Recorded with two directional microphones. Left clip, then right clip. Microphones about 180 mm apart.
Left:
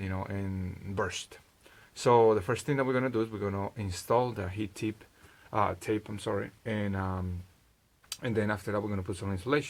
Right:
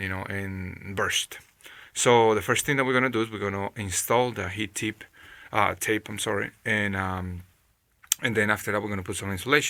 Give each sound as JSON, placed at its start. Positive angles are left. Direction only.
{"t": 0.0, "sound": "speech", "side_deg": -5}